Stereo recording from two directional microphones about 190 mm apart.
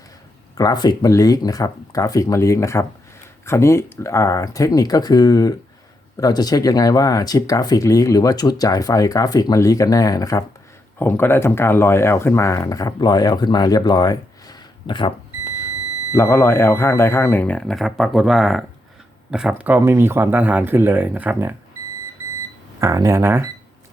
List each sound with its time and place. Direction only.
0.5 s speech: 20° left (ahead or behind)
16.1 s speech: 15° left (ahead or behind); by 21.5 s 10° right (ahead or behind)
22.8 s speech: 15° right (ahead or behind)